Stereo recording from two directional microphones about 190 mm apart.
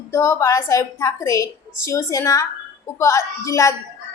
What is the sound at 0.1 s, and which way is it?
A woman's voice, 15° left (ahead or behind).